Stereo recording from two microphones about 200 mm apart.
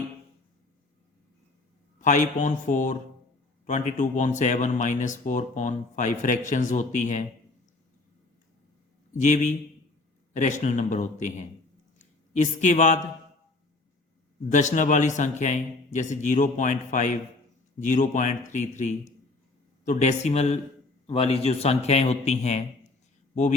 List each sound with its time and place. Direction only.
2.0 s speech: 40° left (ahead or behind)
9.2 s speech: 40° left (ahead or behind)
14.5 s speech: 40° left (ahead or behind)